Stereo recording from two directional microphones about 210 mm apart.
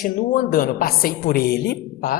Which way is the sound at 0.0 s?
45° left (ahead or behind).